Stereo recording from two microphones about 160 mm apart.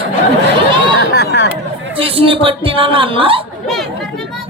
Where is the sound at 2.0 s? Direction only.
35° right (ahead or behind).